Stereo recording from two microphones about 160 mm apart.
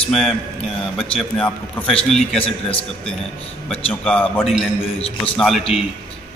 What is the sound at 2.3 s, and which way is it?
Speech, 35° left (ahead or behind).